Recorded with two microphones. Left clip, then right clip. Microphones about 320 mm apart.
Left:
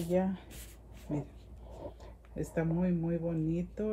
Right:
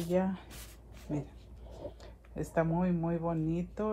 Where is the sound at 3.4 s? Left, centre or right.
Right.